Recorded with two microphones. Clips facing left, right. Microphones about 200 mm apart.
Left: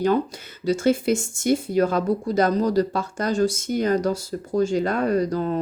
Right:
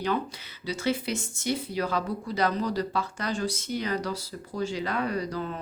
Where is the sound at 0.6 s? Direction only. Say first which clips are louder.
Left 9 dB; 45° left (ahead or behind).